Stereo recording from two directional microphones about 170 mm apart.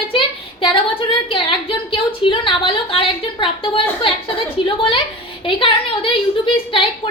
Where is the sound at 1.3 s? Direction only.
30° left (ahead or behind).